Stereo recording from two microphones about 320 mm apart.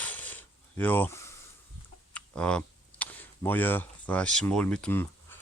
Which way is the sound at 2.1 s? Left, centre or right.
Centre.